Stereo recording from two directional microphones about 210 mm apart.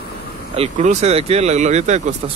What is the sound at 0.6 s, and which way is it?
Speech, 35° right (ahead or behind).